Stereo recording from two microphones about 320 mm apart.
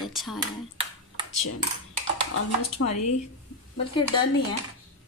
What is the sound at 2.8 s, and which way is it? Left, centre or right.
Speech, left.